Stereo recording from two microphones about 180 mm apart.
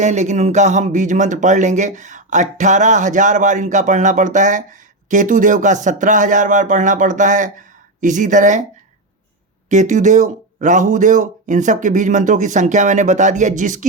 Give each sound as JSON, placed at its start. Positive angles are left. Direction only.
{"t": 0.0, "sound": "speech", "side_deg": -40}
{"t": 9.6, "sound": "speech", "side_deg": -40}